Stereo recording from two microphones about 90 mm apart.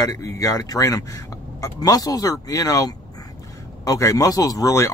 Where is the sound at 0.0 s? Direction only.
40° left (ahead or behind).